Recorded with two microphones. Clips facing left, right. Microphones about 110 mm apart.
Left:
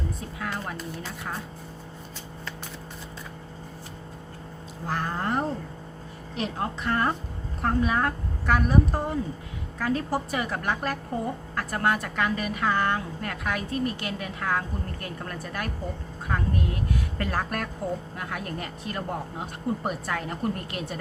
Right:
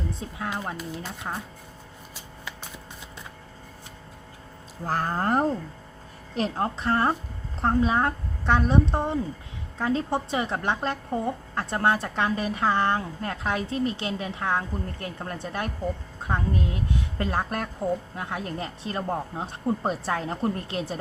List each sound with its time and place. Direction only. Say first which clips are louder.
0.2 s a woman's voice: right 1 dB; 25° right (ahead or behind)
4.9 s a woman's voice: right 3 dB; 40° right (ahead or behind)